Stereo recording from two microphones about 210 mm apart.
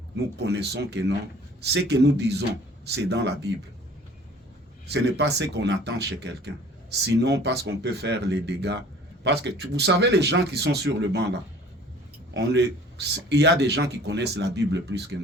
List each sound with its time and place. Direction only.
0.3 s speech: 55° right (ahead or behind)
4.9 s speech: 55° right (ahead or behind)